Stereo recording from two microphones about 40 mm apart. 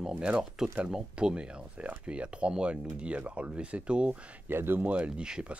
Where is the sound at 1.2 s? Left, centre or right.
Right.